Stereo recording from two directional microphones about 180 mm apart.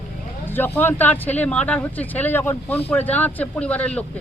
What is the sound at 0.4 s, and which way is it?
Speech, 10° left (ahead or behind).